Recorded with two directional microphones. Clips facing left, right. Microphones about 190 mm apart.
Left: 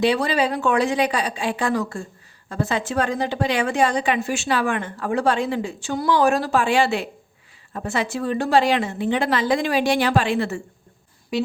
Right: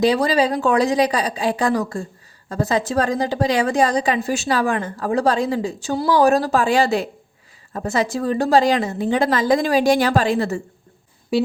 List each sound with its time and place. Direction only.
0.0 s a woman's voice: 35° right (ahead or behind)